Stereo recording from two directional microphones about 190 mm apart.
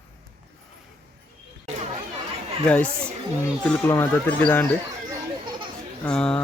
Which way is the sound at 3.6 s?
5° left (ahead or behind).